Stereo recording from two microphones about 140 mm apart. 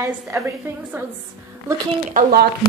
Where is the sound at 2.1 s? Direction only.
75° right (ahead or behind).